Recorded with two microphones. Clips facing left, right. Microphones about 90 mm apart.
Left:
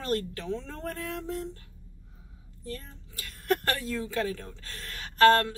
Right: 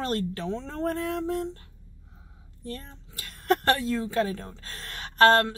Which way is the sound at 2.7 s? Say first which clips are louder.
Right 2 dB; 35° right (ahead or behind).